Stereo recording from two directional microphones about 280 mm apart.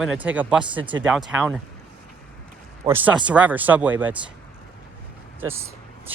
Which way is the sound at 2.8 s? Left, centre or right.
Centre.